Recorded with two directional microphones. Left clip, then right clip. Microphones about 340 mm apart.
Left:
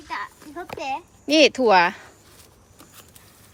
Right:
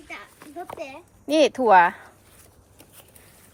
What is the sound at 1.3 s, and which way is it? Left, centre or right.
Speech, centre.